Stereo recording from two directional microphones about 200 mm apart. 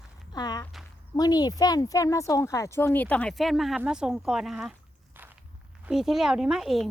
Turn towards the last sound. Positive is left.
turn(degrees=0)  # may be behind; listen again after turning